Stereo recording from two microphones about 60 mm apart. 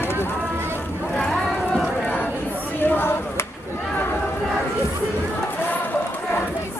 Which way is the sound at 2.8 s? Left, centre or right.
Left.